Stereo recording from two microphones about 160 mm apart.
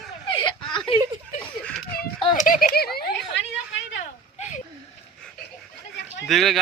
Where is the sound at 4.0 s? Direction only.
50° left (ahead or behind).